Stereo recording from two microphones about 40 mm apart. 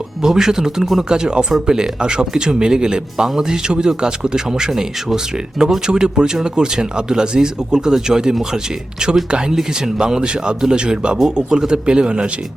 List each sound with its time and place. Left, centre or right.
0.2 s a man's voice: centre